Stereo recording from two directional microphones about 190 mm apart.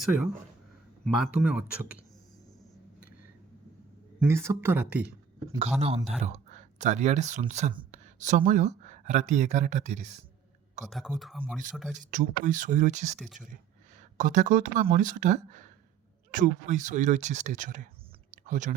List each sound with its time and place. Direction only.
1.0 s speech: centre (ahead or behind)
4.2 s speech: 15° right (ahead or behind)
6.1 s speech: 35° right (ahead or behind)
10.8 s speech: centre (ahead or behind)
12.1 s speech: 45° right (ahead or behind)
13.1 s speech: centre (ahead or behind)
14.2 s speech: 40° right (ahead or behind)
18.3 s a sound: 40° right (ahead or behind)